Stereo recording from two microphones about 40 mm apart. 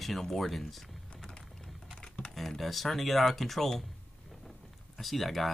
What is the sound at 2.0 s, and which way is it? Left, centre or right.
Typing, left.